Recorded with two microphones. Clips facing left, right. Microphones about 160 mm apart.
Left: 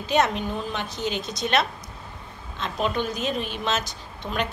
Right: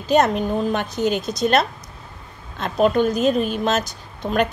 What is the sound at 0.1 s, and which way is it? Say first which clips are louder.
A woman's voice: right 6 dB; 45° right (ahead or behind).